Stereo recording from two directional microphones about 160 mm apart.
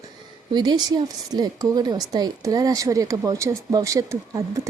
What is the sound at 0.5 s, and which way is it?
Speech, 25° right (ahead or behind).